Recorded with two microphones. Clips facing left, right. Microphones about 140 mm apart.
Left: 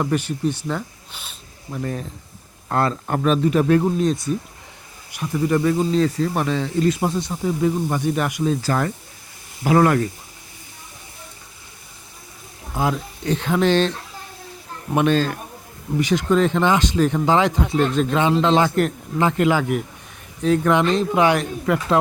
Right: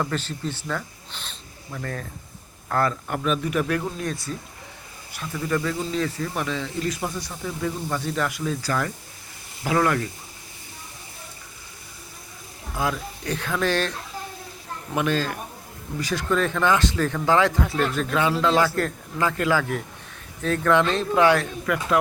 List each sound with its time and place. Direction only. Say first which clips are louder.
0.0 s a man's voice: left 6 dB; 15° left (ahead or behind); by 3.8 s 30° left (ahead or behind)
3.9 s speech: left 9 dB; 20° left (ahead or behind)
5.9 s speech: left 7 dB; 35° left (ahead or behind)
6.8 s speech: left 8 dB; 25° left (ahead or behind)
8.6 s speech: left 4 dB; 35° left (ahead or behind)
12.7 s speech: left 4 dB; 25° left (ahead or behind)
14.9 s speech: left 6 dB; 25° left (ahead or behind)